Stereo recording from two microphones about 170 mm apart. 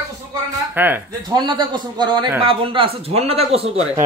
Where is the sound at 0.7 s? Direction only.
10° right (ahead or behind).